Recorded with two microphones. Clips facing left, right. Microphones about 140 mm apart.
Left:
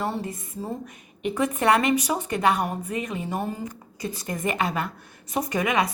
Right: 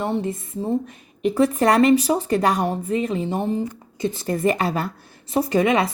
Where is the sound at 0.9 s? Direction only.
35° right (ahead or behind).